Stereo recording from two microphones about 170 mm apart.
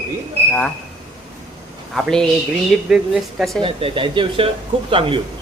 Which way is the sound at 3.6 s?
35° right (ahead or behind).